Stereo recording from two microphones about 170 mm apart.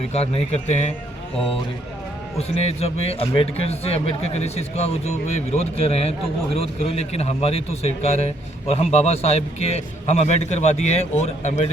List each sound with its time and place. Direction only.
0.1 s a man's voice: 40° left (ahead or behind)
2.6 s a man's voice: 40° left (ahead or behind)